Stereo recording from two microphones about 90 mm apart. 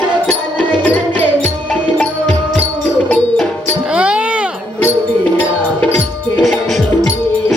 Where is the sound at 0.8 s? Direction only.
20° left (ahead or behind).